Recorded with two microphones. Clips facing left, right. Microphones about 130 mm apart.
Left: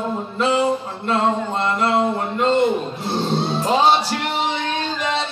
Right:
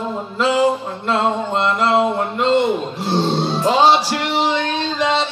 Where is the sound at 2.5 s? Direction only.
90° right.